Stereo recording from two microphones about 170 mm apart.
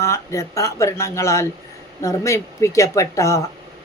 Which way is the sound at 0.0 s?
15° left (ahead or behind).